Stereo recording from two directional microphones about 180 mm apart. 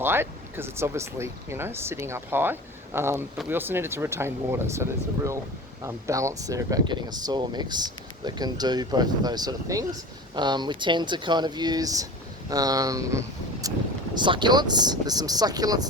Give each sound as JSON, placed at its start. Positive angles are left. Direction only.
{"t": 0.0, "sound": "speech", "side_deg": -10}